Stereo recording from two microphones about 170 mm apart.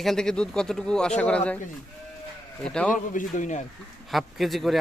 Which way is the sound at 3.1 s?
50° left (ahead or behind).